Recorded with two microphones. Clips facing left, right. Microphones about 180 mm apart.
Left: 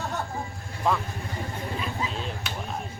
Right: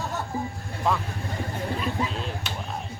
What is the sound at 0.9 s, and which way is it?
Speech, centre (ahead or behind).